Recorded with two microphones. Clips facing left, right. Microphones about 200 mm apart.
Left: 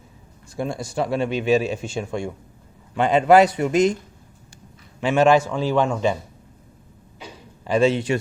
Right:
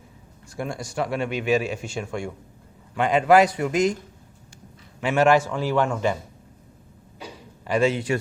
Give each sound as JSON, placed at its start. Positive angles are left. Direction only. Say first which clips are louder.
{"t": 0.5, "sound": "a man's voice", "louder": "left 3 dB", "side_deg": 25}
{"t": 4.9, "sound": "a man's voice", "louder": "left 2 dB", "side_deg": 20}
{"t": 7.6, "sound": "a man's voice", "louder": "left 3 dB", "side_deg": 25}